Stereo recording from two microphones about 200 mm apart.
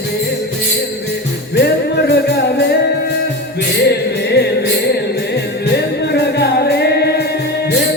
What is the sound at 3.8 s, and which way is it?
Music, 55° left (ahead or behind).